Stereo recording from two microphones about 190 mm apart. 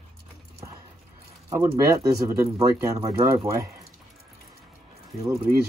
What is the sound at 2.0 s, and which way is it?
Speech, 15° right (ahead or behind).